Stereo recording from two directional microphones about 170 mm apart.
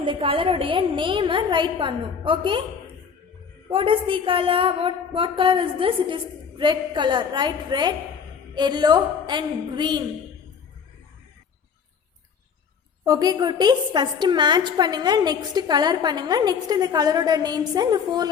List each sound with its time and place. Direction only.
0.0 s a woman's voice: 30° right (ahead or behind)
3.7 s a woman's voice: 30° right (ahead or behind)
13.1 s a woman's voice: 25° right (ahead or behind)